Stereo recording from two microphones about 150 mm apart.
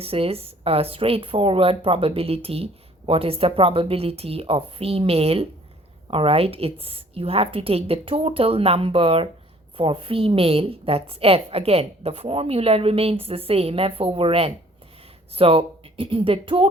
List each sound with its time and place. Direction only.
0.0 s a woman's voice: 40° right (ahead or behind)